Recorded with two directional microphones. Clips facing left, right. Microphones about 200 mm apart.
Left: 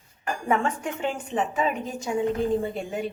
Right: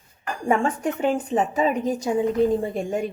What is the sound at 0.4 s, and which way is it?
Speech, 35° right (ahead or behind).